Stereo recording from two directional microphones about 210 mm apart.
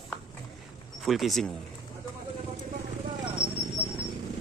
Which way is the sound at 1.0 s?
Centre (ahead or behind).